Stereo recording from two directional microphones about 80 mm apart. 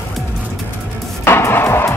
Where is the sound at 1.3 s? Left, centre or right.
Left.